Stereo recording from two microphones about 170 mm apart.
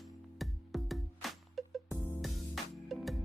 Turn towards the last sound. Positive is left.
turn(degrees=0)  # may be behind; listen again after turning